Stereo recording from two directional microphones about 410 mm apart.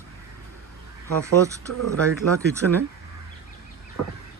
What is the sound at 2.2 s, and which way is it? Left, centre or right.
Speech, right.